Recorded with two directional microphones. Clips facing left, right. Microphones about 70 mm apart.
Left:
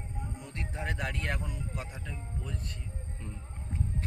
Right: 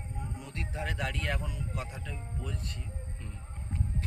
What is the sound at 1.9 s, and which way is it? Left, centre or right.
Speech, centre.